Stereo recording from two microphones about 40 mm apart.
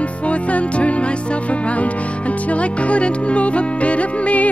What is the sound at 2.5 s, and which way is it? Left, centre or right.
Music, left.